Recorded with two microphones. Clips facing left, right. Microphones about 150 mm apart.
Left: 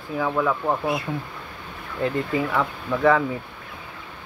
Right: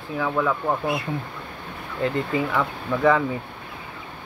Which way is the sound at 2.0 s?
5° left (ahead or behind).